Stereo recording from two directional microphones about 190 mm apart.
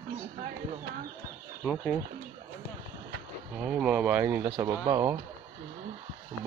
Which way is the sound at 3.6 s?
5° right (ahead or behind).